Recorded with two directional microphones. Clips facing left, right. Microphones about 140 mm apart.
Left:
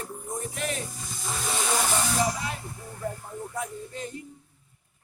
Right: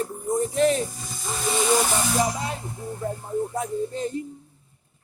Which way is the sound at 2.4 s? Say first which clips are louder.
Right 4 dB; 25° right (ahead or behind).